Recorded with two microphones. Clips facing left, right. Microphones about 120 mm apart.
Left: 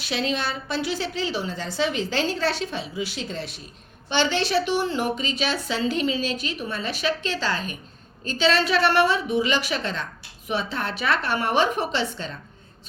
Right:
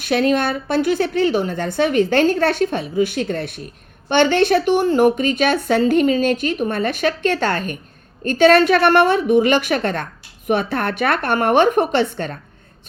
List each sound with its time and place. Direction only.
0.0 s a woman's voice: 55° right (ahead or behind)